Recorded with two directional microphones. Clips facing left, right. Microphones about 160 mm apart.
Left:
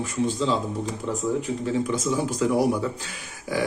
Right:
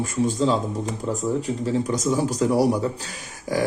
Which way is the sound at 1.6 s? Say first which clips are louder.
Right 2 dB; 40° right (ahead or behind).